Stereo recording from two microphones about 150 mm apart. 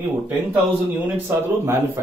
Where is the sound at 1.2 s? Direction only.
15° right (ahead or behind).